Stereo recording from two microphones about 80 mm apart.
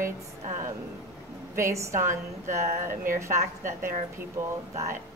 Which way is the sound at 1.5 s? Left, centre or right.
Right.